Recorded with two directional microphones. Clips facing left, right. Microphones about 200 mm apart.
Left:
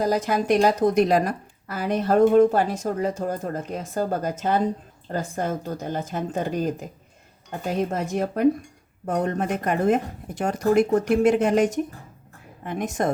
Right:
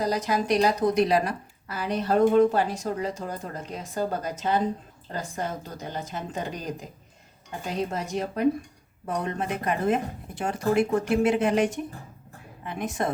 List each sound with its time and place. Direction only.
0.0 s a woman's voice: 50° left (ahead or behind)
7.9 s a woman's voice: 50° left (ahead or behind)